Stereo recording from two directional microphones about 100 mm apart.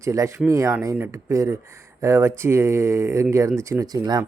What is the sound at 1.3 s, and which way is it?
Speech, 30° right (ahead or behind).